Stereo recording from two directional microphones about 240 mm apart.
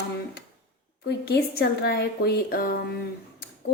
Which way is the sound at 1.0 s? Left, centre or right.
Left.